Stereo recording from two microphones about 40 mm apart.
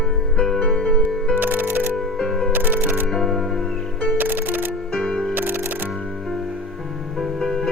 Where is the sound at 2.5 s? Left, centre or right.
Right.